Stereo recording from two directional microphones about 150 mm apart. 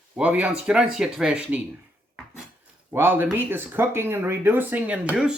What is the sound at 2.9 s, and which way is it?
Speech, 15° right (ahead or behind).